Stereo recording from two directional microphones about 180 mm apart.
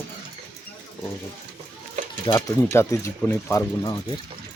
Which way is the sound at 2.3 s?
15° left (ahead or behind).